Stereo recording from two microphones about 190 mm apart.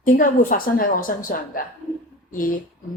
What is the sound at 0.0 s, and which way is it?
A woman's voice, 45° left (ahead or behind).